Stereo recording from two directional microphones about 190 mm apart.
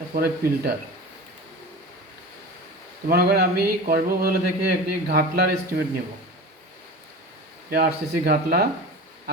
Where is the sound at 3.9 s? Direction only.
50° right (ahead or behind).